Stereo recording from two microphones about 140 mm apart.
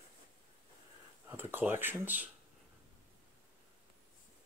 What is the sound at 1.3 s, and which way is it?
Speech, 15° right (ahead or behind).